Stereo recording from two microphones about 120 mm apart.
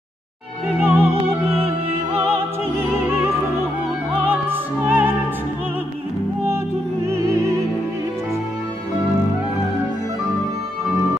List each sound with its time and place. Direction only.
0.7 s opera: 15° right (ahead or behind)
2.8 s music: 20° right (ahead or behind)
4.1 s opera: 15° right (ahead or behind)